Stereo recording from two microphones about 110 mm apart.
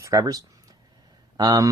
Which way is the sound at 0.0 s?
30° right (ahead or behind).